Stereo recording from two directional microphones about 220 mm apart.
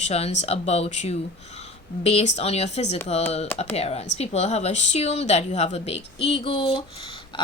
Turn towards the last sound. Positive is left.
turn(degrees=20)  # may be behind; listen again after turning